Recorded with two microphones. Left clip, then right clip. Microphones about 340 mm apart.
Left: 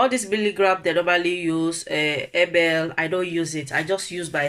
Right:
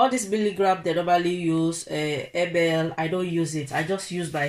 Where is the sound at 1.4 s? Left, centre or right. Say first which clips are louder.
Left 1 dB; left.